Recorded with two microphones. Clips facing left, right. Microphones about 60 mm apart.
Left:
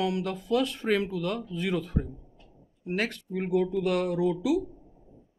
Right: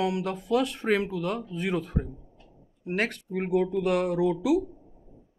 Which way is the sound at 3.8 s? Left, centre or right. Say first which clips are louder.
Right 2 dB; right.